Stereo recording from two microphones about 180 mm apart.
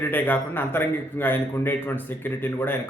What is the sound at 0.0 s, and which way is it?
A man's voice, 10° left (ahead or behind).